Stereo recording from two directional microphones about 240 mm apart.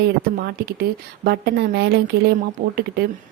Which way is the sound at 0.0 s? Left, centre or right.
Right.